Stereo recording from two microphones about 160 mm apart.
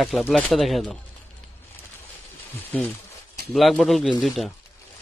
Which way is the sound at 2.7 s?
10° left (ahead or behind).